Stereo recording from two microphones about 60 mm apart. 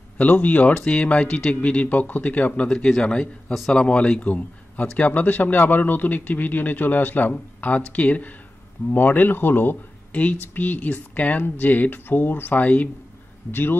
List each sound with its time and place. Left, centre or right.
0.2 s a man's voice: left
13.5 s speech: left